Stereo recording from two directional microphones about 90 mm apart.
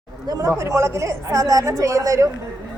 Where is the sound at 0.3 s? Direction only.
40° right (ahead or behind).